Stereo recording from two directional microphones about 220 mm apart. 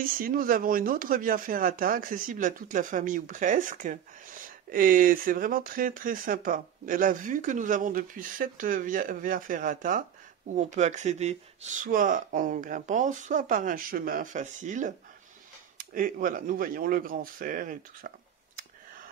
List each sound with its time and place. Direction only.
0.0 s speech: 40° right (ahead or behind)